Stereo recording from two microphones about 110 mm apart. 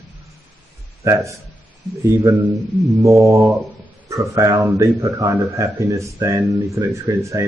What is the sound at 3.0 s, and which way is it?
Speech, 30° right (ahead or behind).